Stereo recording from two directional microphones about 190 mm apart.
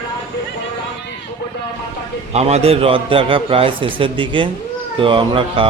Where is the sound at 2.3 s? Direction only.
35° right (ahead or behind).